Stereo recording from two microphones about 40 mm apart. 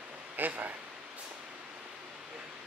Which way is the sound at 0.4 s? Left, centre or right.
Right.